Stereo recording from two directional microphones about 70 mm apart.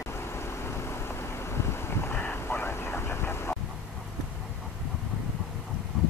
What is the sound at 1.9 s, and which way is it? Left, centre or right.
Vehicle, left.